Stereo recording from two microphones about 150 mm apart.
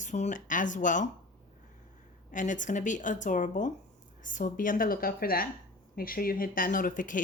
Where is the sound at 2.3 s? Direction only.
60° left (ahead or behind).